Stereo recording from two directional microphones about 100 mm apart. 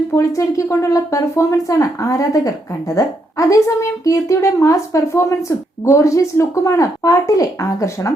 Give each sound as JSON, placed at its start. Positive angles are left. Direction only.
{"t": 0.2, "sound": "a woman's voice", "side_deg": 30}